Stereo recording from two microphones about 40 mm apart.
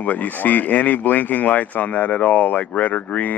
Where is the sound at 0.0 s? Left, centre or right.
Left.